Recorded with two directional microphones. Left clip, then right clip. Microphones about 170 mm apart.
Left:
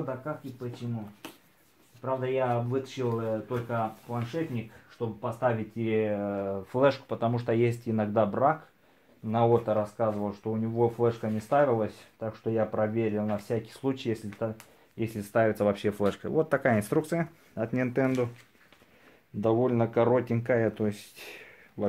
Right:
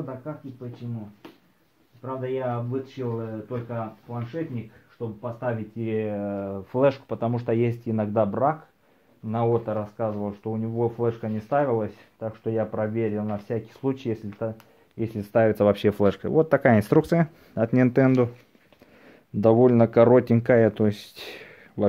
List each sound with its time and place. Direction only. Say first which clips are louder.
1.2 s a sound: left 1 dB; 5° left (ahead or behind)
2.0 s speech: left 1 dB; centre (ahead or behind)
5.9 s speech: even; 20° right (ahead or behind)
15.1 s speech: right 5 dB; 40° right (ahead or behind)
19.4 s speech: right 8 dB; 55° right (ahead or behind)